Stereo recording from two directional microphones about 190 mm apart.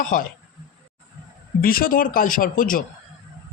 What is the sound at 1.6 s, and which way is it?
A man's voice, 50° left (ahead or behind).